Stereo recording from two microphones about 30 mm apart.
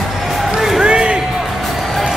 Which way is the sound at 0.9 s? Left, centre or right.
Right.